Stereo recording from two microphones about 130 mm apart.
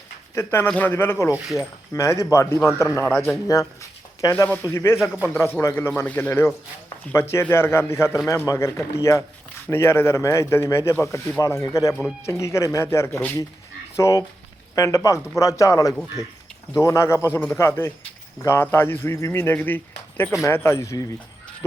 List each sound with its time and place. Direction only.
0.3 s speech: 15° left (ahead or behind)